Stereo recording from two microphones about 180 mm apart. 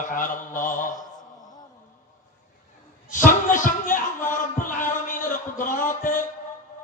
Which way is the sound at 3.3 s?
45° left (ahead or behind).